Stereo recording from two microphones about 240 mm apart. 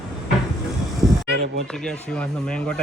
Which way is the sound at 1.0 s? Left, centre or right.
Centre.